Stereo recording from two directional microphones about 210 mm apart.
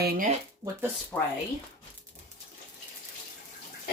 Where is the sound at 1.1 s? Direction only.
10° left (ahead or behind).